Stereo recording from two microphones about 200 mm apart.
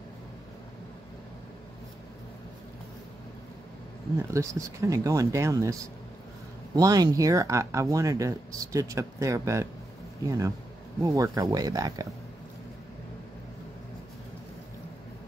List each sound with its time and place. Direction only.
4.2 s speech: 15° right (ahead or behind)